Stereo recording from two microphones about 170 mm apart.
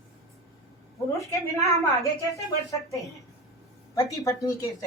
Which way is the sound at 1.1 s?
20° left (ahead or behind).